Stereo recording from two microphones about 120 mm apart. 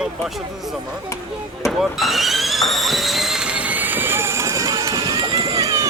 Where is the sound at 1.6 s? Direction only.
Centre (ahead or behind); by 5.3 s 30° right (ahead or behind).